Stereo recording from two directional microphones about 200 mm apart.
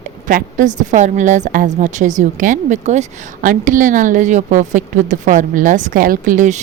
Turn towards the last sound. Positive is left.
turn(degrees=-40)  # may be behind; listen again after turning